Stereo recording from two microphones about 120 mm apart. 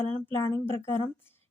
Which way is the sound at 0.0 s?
20° left (ahead or behind).